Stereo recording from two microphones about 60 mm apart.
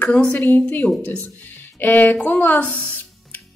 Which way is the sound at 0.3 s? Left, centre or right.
Left.